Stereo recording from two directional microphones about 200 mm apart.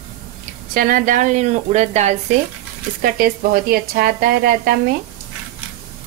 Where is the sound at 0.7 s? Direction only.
45° right (ahead or behind).